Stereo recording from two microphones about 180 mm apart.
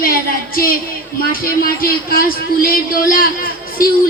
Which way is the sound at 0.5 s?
55° left (ahead or behind).